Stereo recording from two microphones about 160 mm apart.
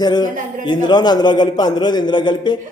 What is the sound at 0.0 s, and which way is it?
A man's voice, 25° left (ahead or behind).